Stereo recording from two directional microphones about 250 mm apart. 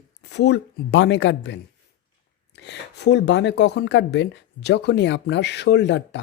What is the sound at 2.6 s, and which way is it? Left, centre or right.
Speech, left.